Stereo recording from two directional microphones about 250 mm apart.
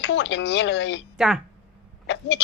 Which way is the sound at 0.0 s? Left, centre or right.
Left.